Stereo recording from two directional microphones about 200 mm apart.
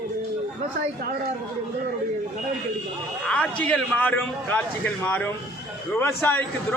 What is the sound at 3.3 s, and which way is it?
A man's voice, 5° left (ahead or behind).